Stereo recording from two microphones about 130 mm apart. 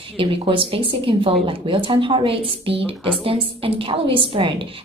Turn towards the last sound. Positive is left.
turn(degrees=-40)  # may be behind; listen again after turning